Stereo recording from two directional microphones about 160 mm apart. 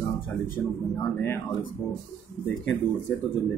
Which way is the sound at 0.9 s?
15° left (ahead or behind).